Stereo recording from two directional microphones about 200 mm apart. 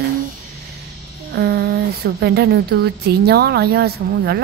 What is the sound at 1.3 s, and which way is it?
Speech, 55° right (ahead or behind).